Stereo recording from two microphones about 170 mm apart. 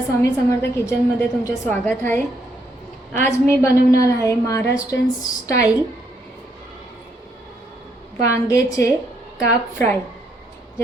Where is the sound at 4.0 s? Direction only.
20° left (ahead or behind).